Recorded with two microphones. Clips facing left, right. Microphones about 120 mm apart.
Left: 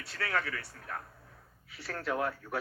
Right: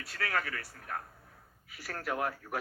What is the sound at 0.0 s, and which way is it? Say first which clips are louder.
A man's voice: left 1 dB; 25° left (ahead or behind).